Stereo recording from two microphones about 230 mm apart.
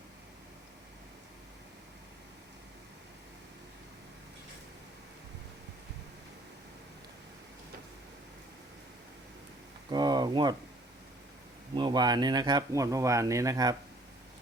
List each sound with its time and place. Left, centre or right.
9.9 s speech: centre
11.7 s speech: centre